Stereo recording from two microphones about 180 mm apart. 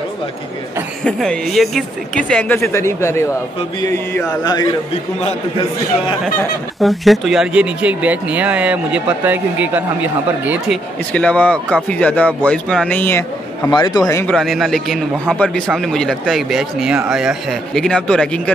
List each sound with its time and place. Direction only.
1.0 s a man's voice: 5° left (ahead or behind); by 4.7 s 20° left (ahead or behind)
6.8 s speech: centre (ahead or behind)
11.1 s speech: 10° left (ahead or behind)
13.7 s a man's voice: 25° left (ahead or behind)
14.3 s a man's voice: centre (ahead or behind)